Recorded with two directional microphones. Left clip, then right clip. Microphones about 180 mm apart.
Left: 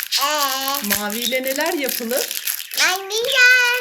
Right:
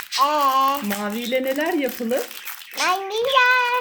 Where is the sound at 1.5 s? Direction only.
10° right (ahead or behind).